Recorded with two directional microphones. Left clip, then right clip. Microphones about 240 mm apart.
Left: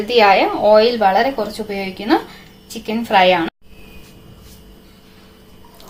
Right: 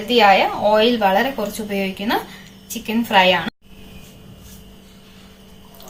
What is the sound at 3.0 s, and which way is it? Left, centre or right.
Speech, left.